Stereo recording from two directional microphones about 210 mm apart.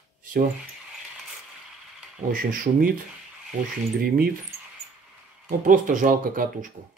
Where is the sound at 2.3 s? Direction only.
40° right (ahead or behind).